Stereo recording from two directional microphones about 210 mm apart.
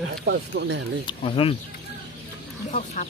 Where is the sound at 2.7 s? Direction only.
35° left (ahead or behind).